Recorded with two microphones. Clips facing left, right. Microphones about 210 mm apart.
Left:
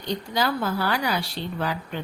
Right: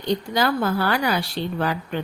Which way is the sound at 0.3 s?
55° right (ahead or behind).